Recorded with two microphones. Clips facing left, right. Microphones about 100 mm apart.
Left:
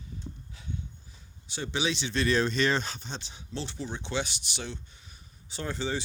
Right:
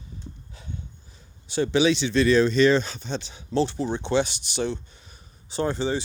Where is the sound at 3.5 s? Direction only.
40° right (ahead or behind).